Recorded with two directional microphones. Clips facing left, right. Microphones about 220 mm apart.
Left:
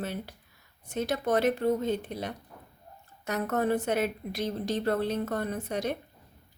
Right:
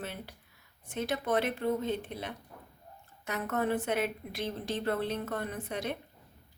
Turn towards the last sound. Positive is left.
turn(degrees=40)  # may be behind; listen again after turning